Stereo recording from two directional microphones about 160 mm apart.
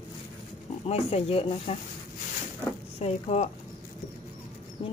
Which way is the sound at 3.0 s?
40° left (ahead or behind).